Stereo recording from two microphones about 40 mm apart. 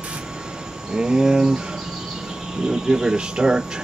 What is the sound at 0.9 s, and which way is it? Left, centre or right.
Speech, centre.